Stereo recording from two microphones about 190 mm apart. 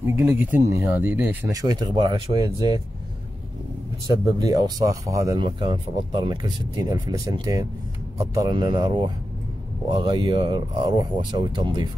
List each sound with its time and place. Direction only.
0.1 s speech: 10° right (ahead or behind)
4.1 s speech: 20° right (ahead or behind)